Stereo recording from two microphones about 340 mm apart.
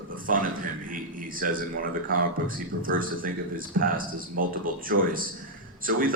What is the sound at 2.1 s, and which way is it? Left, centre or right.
Speech, right.